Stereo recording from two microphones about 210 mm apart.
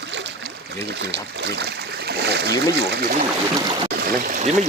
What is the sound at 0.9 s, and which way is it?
Speech, 55° right (ahead or behind).